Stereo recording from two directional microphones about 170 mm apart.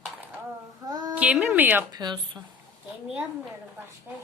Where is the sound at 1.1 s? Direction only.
5° right (ahead or behind).